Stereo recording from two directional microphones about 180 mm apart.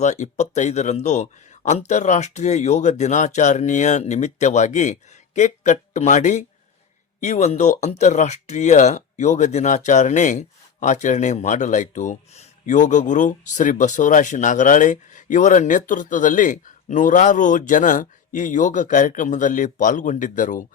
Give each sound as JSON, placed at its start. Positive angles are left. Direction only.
{"t": 0.0, "sound": "speech", "side_deg": 40}